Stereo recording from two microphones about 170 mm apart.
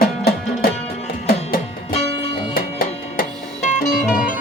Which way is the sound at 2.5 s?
60° left (ahead or behind).